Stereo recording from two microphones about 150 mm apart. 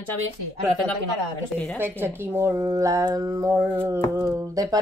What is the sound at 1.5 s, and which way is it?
Speech, 5° left (ahead or behind).